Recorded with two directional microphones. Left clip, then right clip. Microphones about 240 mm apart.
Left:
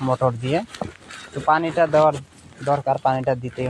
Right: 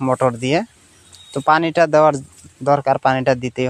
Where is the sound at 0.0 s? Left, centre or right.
Right.